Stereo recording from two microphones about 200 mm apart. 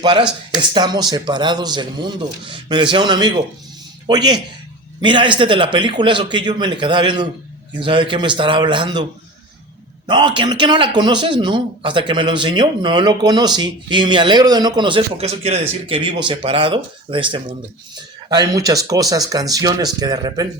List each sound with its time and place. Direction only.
0.0 s a man's voice: 20° right (ahead or behind)
10.1 s a man's voice: 20° right (ahead or behind)